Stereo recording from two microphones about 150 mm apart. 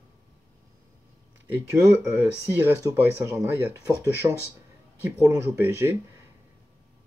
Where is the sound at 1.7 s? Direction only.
15° right (ahead or behind).